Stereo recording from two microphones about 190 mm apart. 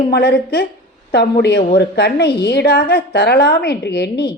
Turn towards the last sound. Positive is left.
turn(degrees=60)  # may be behind; listen again after turning